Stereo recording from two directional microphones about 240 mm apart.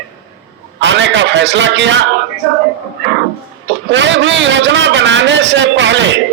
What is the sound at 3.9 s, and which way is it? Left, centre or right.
A man's voice, right.